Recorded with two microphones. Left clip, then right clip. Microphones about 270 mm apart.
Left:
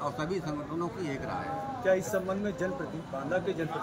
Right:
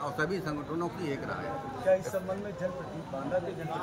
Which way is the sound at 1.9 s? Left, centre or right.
Left.